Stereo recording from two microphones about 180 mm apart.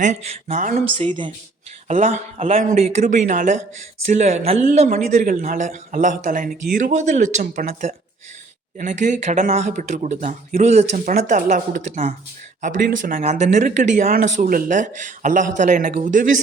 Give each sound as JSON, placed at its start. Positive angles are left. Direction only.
{"t": 0.0, "sound": "speech", "side_deg": -40}
{"t": 0.9, "sound": "a woman's voice", "side_deg": -30}
{"t": 1.9, "sound": "speech", "side_deg": -40}